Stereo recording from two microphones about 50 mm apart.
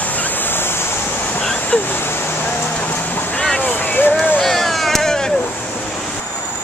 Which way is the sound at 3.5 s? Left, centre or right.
Left.